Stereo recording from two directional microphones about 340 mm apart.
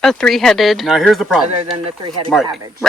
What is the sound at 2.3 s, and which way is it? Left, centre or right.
Speech, centre.